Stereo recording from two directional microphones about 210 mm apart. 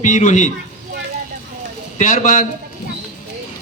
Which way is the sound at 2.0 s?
40° left (ahead or behind).